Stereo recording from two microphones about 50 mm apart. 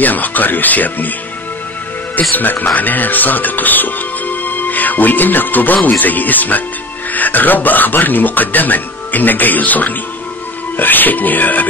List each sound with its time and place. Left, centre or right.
0.0 s speech: left
2.3 s speech: left